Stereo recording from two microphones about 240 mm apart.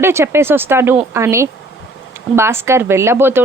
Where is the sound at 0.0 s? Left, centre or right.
Centre.